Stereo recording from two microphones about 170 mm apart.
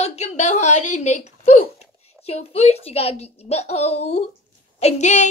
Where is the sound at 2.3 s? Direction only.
35° left (ahead or behind).